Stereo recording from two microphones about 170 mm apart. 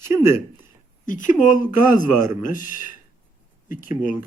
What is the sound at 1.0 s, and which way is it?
A man's voice, 50° left (ahead or behind).